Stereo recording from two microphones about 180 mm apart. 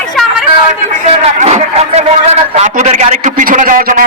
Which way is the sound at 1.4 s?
40° right (ahead or behind).